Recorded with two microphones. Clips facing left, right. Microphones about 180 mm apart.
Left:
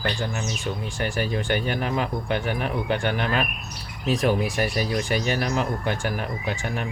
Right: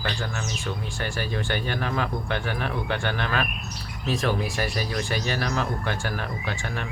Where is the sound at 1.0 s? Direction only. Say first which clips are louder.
Left 4 dB; 20° left (ahead or behind).